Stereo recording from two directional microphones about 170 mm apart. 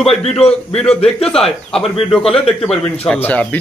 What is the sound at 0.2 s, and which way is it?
Speech, 35° left (ahead or behind).